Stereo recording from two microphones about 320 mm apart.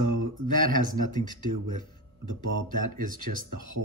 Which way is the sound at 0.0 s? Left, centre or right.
Right.